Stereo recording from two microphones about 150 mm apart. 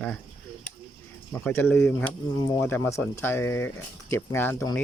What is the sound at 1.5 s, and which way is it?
Speech, 15° left (ahead or behind).